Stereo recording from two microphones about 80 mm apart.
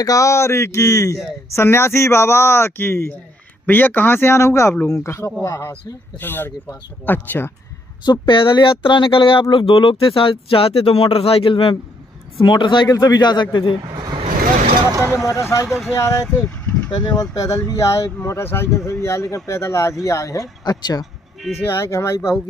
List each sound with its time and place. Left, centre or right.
0.0 s a man's voice: left
6.1 s a man's voice: left
8.0 s speech: left
12.8 s a man's voice: left
13.9 s vehicle: right
15.2 s speech: left
15.6 s speech: centre
16.0 s speech: left
16.4 s vehicle: centre
16.9 s speech: left
21.0 s music: centre
21.6 s speech: left